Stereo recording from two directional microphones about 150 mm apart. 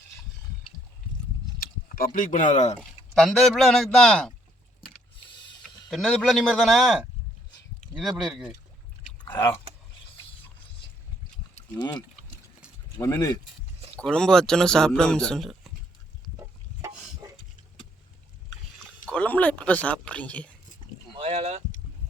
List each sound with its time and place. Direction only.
1.5 s speech: 75° left (ahead or behind); by 2.7 s 55° left (ahead or behind)
3.2 s speech: centre (ahead or behind)
5.9 s speech: centre (ahead or behind)
7.8 s a sound: 55° left (ahead or behind)
8.2 s speech: centre (ahead or behind)
9.2 s speech: 15° left (ahead or behind)
11.8 s speech: 25° left (ahead or behind)
14.0 s speech: 5° left (ahead or behind)
19.0 s speech: 10° left (ahead or behind)
21.2 s speech: 45° right (ahead or behind)